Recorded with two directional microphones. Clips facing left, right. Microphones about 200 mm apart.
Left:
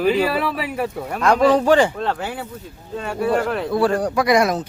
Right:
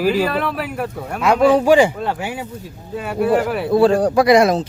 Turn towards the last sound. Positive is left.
turn(degrees=-30)  # may be behind; listen again after turning